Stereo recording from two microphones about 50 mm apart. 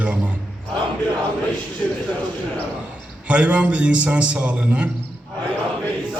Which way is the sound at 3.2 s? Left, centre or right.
Right.